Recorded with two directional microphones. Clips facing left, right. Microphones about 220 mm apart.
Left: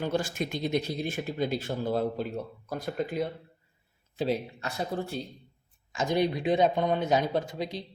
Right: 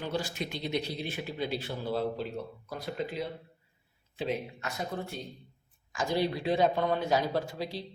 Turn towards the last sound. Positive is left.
turn(degrees=20)  # may be behind; listen again after turning